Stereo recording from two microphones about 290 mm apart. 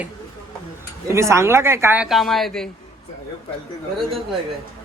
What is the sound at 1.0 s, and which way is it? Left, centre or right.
Speech, centre.